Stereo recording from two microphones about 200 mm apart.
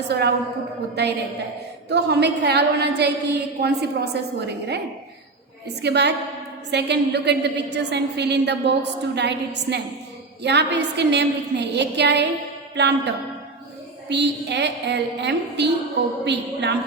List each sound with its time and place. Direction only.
1.0 s a woman's voice: 55° right (ahead or behind)
5.8 s a woman's voice: 55° right (ahead or behind)